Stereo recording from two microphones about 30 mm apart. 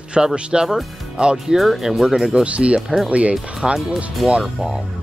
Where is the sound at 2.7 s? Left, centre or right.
Centre.